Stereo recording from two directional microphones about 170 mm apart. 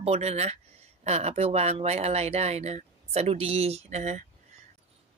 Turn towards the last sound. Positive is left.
turn(degrees=-40)  # may be behind; listen again after turning